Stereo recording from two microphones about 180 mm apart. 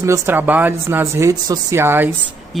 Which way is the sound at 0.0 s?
15° right (ahead or behind).